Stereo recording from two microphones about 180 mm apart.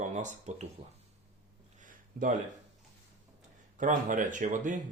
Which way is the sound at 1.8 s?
45° right (ahead or behind).